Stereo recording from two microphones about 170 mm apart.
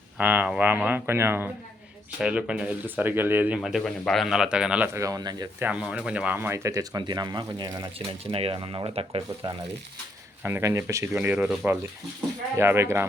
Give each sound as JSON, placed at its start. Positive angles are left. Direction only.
{"t": 0.2, "sound": "speech", "side_deg": -10}
{"t": 4.9, "sound": "speech", "side_deg": -20}
{"t": 5.5, "sound": "speech", "side_deg": -10}
{"t": 10.4, "sound": "speech", "side_deg": -15}